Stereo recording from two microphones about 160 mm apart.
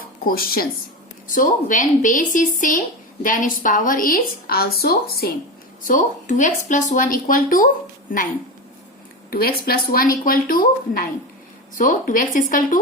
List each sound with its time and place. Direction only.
0.3 s speech: 70° left (ahead or behind)
1.3 s speech: 55° left (ahead or behind); by 5.3 s 70° left (ahead or behind)
5.8 s speech: 55° left (ahead or behind)
9.3 s speech: 70° left (ahead or behind)